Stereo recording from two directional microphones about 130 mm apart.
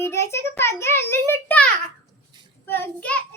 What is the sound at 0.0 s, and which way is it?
A child's voice, 20° left (ahead or behind).